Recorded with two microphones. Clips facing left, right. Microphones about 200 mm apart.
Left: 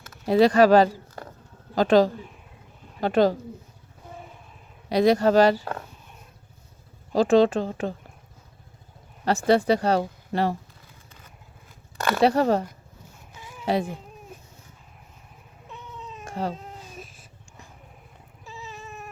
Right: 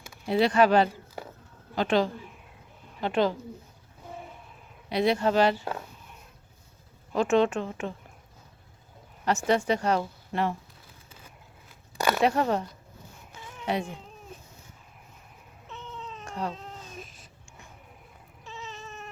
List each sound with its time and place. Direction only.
0.3 s speech: 40° left (ahead or behind)
4.9 s speech: 40° left (ahead or behind)
7.1 s speech: 35° left (ahead or behind)
9.5 s speech: 35° left (ahead or behind)
11.9 s a sound: 10° right (ahead or behind)
12.2 s speech: 35° left (ahead or behind)
16.3 s baby cry: 30° left (ahead or behind)
16.6 s baby cry: 5° left (ahead or behind)
18.4 s cat: 15° left (ahead or behind)